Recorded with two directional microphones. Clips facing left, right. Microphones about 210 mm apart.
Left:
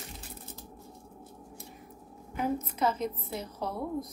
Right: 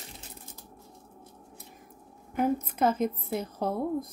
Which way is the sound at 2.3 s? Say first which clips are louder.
Right 4 dB; 50° right (ahead or behind).